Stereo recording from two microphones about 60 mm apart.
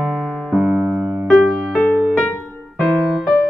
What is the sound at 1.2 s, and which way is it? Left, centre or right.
Music, centre.